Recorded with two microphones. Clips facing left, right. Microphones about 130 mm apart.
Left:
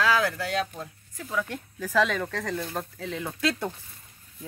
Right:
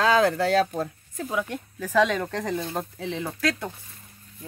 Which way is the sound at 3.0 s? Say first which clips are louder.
Even; centre (ahead or behind).